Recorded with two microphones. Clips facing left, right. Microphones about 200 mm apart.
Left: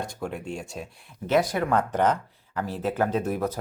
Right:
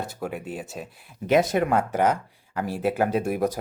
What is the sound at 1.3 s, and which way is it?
Speech, 20° right (ahead or behind).